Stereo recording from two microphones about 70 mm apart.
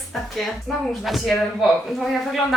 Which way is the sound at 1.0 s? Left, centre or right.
Centre.